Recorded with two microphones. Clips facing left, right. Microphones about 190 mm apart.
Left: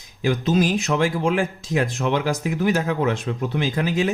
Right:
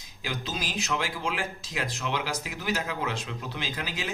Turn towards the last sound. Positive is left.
turn(degrees=50)  # may be behind; listen again after turning